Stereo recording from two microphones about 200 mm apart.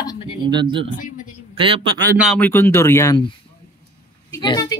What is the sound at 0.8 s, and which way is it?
Speech, 40° left (ahead or behind).